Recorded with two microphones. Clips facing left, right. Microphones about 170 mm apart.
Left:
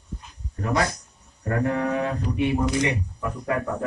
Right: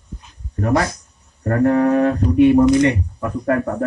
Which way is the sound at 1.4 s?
55° right (ahead or behind).